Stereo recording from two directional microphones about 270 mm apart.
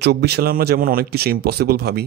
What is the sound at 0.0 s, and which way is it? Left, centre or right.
Speech, right.